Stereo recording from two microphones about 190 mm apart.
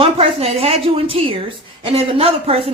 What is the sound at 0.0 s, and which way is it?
A woman's voice, 30° right (ahead or behind).